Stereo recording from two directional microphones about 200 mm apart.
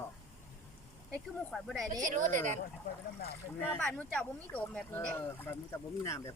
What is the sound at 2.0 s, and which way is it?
Speech, 40° right (ahead or behind).